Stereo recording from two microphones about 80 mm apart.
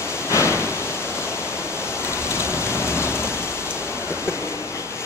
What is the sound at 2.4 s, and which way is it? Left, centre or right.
Rain, left.